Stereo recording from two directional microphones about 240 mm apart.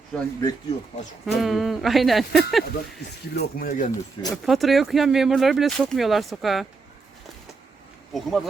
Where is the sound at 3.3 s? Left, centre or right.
Left.